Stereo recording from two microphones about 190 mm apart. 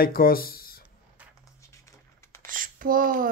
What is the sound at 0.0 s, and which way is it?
Speech, 50° left (ahead or behind).